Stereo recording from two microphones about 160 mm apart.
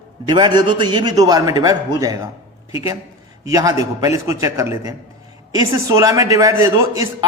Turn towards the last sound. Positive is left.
turn(degrees=-20)  # may be behind; listen again after turning